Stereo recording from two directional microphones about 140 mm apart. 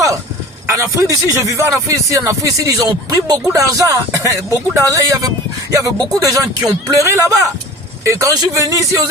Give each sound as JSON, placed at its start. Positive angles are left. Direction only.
{"t": 0.7, "sound": "speech", "side_deg": -20}